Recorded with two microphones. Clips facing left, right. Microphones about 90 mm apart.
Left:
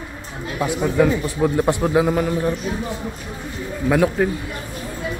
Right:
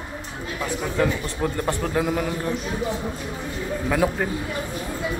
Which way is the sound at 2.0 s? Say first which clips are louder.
Left 5 dB; centre (ahead or behind).